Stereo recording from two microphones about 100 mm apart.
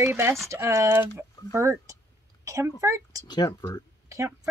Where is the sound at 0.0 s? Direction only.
25° right (ahead or behind).